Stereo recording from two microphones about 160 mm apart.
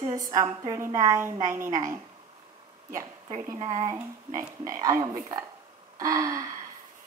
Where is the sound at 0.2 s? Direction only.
20° right (ahead or behind).